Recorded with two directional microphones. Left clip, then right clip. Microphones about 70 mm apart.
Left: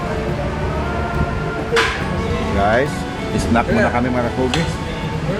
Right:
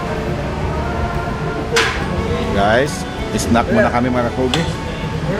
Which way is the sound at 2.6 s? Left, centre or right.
Right.